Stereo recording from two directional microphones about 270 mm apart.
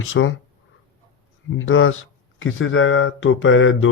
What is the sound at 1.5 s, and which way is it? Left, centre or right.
Speech, left.